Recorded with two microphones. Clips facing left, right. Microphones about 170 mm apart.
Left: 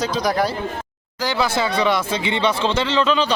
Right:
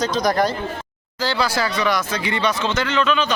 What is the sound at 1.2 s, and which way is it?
Speech, 20° left (ahead or behind).